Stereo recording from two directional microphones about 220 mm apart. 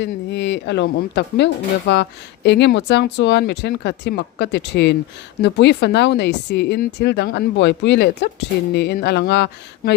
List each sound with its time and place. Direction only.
0.0 s speech: 50° left (ahead or behind)